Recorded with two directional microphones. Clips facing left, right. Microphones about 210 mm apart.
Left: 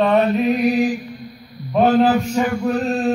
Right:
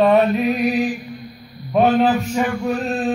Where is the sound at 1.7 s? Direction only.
Centre (ahead or behind).